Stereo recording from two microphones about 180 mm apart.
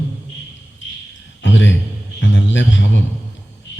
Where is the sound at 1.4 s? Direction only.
90° left.